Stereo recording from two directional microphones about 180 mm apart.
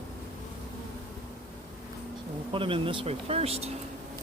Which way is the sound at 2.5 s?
30° right (ahead or behind).